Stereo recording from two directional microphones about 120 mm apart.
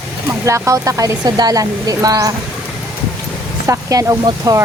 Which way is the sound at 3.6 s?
25° right (ahead or behind).